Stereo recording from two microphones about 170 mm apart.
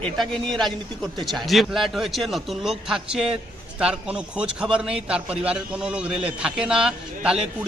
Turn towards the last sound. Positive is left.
turn(degrees=-5)  # may be behind; listen again after turning